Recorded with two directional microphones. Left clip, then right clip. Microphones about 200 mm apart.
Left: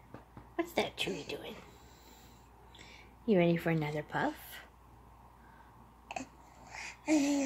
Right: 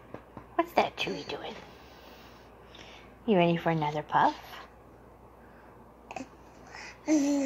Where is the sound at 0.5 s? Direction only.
10° left (ahead or behind).